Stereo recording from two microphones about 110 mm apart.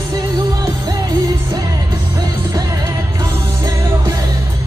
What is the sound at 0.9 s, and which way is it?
Music, 40° right (ahead or behind).